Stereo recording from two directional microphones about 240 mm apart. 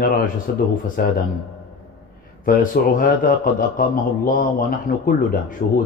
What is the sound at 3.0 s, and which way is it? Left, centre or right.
A man's voice, left.